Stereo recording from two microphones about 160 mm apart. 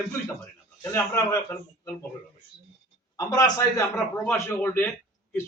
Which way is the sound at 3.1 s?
20° left (ahead or behind).